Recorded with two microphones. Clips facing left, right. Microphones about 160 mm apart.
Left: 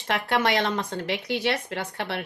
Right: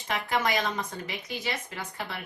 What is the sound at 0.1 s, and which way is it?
Speech, 70° left (ahead or behind).